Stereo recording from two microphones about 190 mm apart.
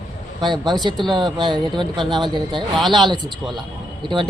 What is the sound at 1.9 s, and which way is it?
A man's voice, centre (ahead or behind).